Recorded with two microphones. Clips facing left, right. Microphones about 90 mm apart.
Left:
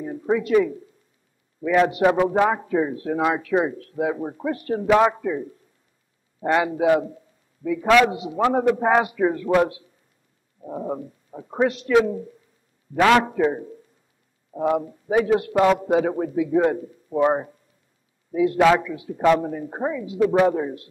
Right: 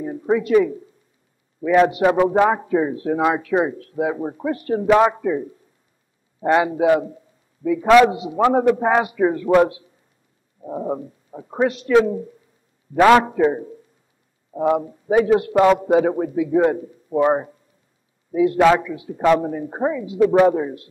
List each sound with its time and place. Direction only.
0.0 s a man's voice: 10° right (ahead or behind)
13.1 s a man's voice: 15° right (ahead or behind)
18.6 s a man's voice: centre (ahead or behind)
18.9 s a man's voice: 15° right (ahead or behind)